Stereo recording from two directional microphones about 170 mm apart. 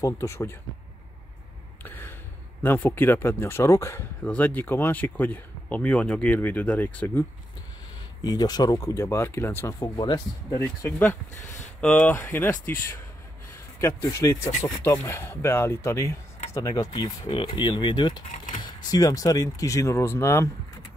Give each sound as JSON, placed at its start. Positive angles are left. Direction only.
{"t": 0.0, "sound": "speech", "side_deg": 20}
{"t": 1.8, "sound": "gasp", "side_deg": 10}
{"t": 2.6, "sound": "speech", "side_deg": 10}
{"t": 8.2, "sound": "speech", "side_deg": 25}
{"t": 13.7, "sound": "speech", "side_deg": 15}
{"t": 18.3, "sound": "typing", "side_deg": 50}
{"t": 18.6, "sound": "speech", "side_deg": 25}